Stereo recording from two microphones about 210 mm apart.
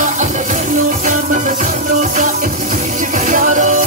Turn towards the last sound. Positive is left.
turn(degrees=-35)  # may be behind; listen again after turning